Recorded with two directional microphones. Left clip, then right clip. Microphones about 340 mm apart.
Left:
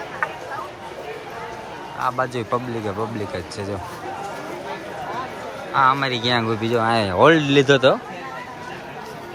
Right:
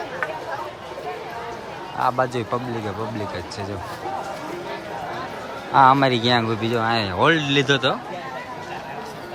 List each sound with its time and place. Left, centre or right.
2.0 s speech: centre
5.7 s speech: centre